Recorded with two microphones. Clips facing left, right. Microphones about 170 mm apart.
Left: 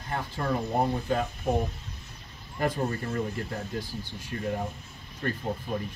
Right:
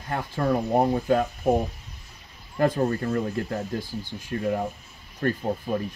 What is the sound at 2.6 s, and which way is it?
Speech, 50° right (ahead or behind).